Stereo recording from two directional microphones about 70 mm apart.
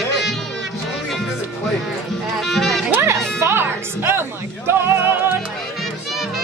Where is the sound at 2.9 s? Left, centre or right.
Right.